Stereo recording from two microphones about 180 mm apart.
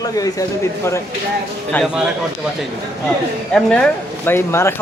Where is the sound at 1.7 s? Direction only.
Centre (ahead or behind).